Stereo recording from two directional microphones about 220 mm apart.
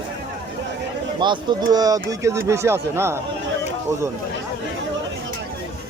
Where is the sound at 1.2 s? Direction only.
20° right (ahead or behind).